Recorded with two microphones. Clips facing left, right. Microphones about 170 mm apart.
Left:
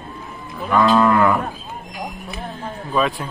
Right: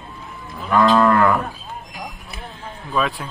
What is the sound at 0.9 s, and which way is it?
Moo, 10° left (ahead or behind).